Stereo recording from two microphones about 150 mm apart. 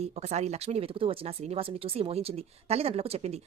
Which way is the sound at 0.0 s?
45° right (ahead or behind).